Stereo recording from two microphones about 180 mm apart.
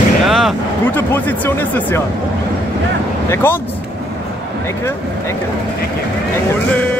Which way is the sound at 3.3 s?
15° left (ahead or behind).